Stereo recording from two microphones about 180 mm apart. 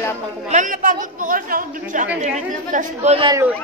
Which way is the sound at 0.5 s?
45° right (ahead or behind).